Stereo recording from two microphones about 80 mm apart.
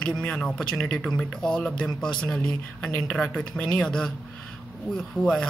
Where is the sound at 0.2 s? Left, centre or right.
Centre.